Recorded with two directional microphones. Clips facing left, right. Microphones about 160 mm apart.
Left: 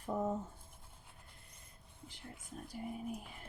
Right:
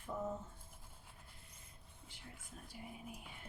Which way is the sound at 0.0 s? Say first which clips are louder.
Left 6 dB; 40° left (ahead or behind).